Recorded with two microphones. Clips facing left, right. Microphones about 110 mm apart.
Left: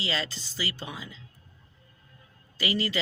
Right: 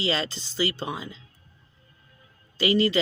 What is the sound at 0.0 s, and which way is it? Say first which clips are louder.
Speech: right 5 dB; 30° right (ahead or behind).